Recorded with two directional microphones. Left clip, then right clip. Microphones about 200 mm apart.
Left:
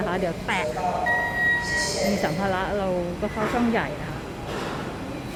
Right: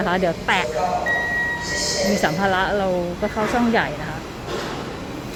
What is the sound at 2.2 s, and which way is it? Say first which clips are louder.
Speech: right 6 dB; 15° right (ahead or behind).